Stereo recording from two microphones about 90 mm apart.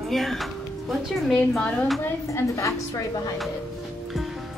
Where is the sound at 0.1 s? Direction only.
Centre (ahead or behind).